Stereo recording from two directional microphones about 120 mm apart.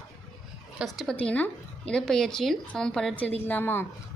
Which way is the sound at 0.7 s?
Centre (ahead or behind).